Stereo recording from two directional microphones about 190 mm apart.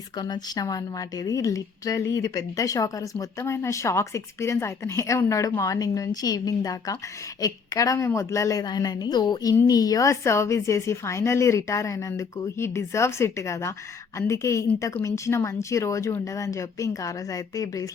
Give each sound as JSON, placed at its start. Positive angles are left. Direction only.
{"t": 0.2, "sound": "a woman's voice", "side_deg": 20}